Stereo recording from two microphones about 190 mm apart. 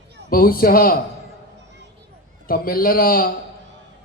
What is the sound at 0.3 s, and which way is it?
Speech, 50° left (ahead or behind).